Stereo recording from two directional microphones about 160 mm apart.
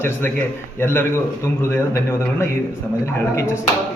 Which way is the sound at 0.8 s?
15° left (ahead or behind).